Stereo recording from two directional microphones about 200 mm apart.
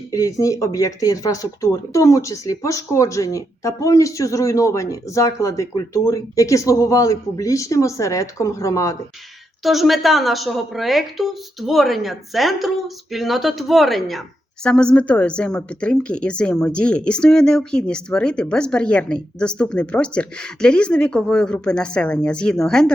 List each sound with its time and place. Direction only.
0.1 s speech: 15° left (ahead or behind)
9.6 s a woman's voice: centre (ahead or behind)